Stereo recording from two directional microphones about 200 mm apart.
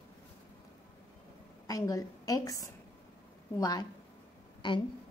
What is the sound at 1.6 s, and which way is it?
A woman's voice, 15° left (ahead or behind).